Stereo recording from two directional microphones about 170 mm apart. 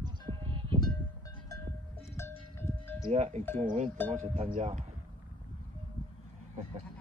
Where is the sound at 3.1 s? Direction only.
40° right (ahead or behind).